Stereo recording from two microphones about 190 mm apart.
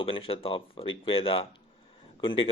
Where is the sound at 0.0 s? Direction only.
30° left (ahead or behind).